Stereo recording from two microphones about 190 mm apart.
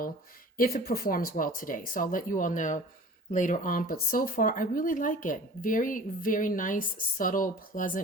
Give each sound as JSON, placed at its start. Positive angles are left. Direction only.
{"t": 0.5, "sound": "speech", "side_deg": 50}